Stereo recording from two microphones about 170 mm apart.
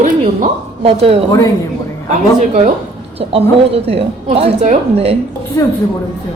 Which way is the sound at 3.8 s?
35° right (ahead or behind).